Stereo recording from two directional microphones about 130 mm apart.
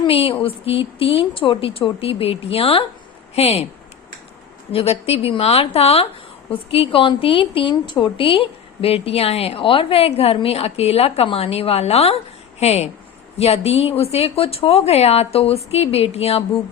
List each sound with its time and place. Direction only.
0.1 s a woman's voice: 45° left (ahead or behind)
4.7 s a woman's voice: 50° left (ahead or behind)